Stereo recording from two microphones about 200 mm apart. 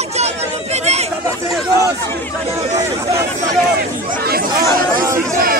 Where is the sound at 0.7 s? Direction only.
35° right (ahead or behind).